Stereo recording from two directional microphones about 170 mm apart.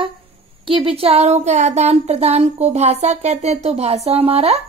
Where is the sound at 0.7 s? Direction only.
30° right (ahead or behind).